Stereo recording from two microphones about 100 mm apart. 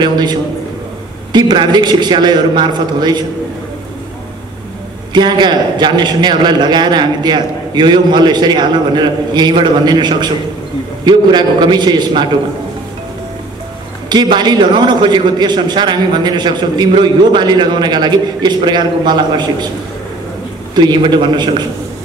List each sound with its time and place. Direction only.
0.0 s a man's voice: 45° right (ahead or behind)
5.1 s a man's voice: 50° right (ahead or behind)
14.0 s a man's voice: 45° right (ahead or behind)
20.7 s a man's voice: 50° right (ahead or behind)